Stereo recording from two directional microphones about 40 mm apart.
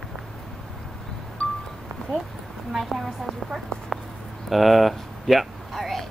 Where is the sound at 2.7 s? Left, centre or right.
Centre.